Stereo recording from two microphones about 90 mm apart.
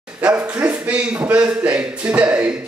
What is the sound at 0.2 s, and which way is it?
A man's voice, 15° right (ahead or behind).